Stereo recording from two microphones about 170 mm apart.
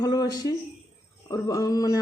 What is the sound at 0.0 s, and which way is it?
A woman's voice, 20° left (ahead or behind).